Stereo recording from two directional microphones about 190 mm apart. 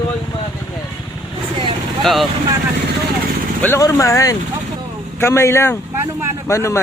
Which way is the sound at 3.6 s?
15° left (ahead or behind).